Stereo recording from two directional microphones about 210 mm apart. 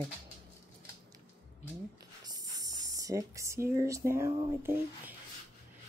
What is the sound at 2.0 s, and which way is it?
Speech, 15° right (ahead or behind).